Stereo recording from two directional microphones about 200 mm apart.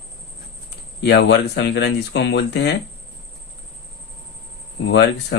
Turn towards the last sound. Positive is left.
turn(degrees=60)  # may be behind; listen again after turning